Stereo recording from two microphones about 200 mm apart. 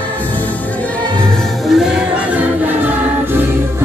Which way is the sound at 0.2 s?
10° left (ahead or behind).